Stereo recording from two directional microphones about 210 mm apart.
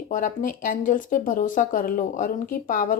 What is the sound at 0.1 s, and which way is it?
A woman's voice, 40° left (ahead or behind).